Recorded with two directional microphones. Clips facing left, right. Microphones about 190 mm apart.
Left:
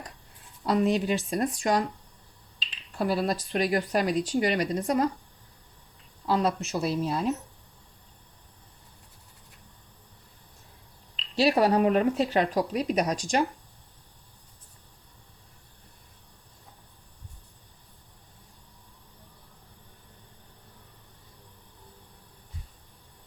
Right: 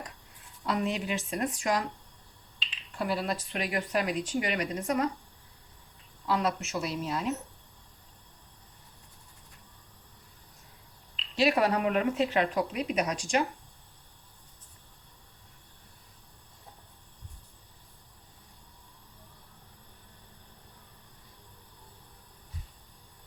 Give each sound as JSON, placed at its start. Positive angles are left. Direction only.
{"t": 0.6, "sound": "speech", "side_deg": 35}
{"t": 6.2, "sound": "speech", "side_deg": 30}
{"t": 11.3, "sound": "speech", "side_deg": 35}